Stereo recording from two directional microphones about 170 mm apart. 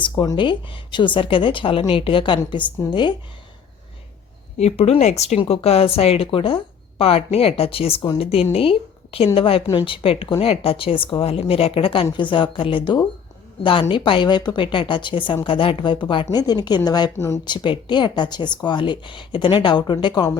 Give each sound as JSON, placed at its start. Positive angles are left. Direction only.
{"t": 0.0, "sound": "speech", "side_deg": 30}
{"t": 4.5, "sound": "speech", "side_deg": 40}
{"t": 17.4, "sound": "speech", "side_deg": 25}